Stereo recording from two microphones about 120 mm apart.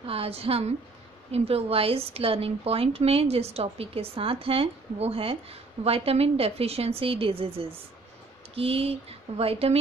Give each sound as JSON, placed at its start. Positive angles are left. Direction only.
{"t": 0.0, "sound": "a woman's voice", "side_deg": -50}